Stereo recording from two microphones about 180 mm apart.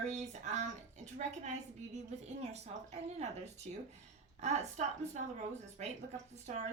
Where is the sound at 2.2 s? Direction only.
35° right (ahead or behind).